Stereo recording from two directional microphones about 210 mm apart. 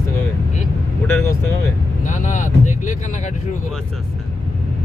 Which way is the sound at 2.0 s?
35° left (ahead or behind).